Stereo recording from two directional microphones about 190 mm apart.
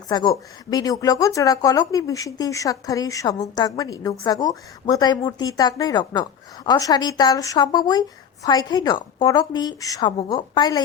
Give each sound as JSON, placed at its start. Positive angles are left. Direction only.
{"t": 0.1, "sound": "speech", "side_deg": 20}